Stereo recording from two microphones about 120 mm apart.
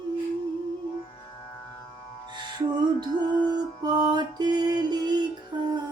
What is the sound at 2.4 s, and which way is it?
Music, 40° right (ahead or behind).